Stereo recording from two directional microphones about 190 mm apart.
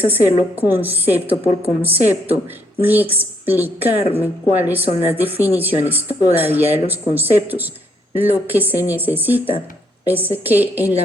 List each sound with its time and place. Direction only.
0.0 s a woman's voice: 10° right (ahead or behind)